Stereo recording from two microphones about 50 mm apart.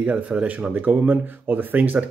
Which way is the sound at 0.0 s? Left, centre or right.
Right.